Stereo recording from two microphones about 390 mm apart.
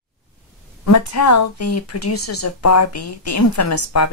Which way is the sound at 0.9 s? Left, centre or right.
Left.